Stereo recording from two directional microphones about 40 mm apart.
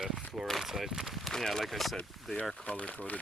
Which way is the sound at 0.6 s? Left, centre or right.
Centre.